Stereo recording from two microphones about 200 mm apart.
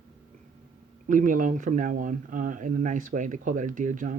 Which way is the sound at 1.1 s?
40° right (ahead or behind).